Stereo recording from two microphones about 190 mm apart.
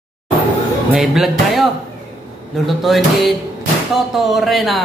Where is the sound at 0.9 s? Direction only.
Centre (ahead or behind).